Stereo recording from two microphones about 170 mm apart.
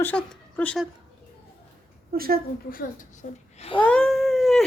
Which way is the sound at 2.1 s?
60° right (ahead or behind).